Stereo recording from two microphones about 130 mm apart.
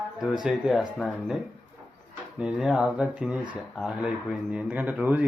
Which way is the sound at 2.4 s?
5° right (ahead or behind).